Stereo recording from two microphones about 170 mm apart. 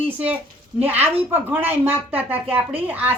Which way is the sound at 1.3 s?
10° right (ahead or behind).